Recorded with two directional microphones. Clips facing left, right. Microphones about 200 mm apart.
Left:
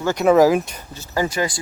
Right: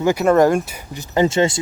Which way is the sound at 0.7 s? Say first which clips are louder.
Right 5 dB; 15° right (ahead or behind).